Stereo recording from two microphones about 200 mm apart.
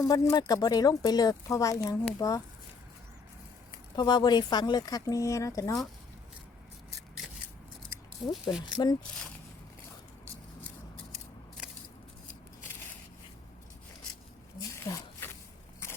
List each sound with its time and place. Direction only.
0.0 s speech: 20° left (ahead or behind)
3.7 s speech: 20° left (ahead or behind)
8.3 s speech: centre (ahead or behind)
14.9 s speech: 15° left (ahead or behind)
15.2 s a sound: 10° left (ahead or behind)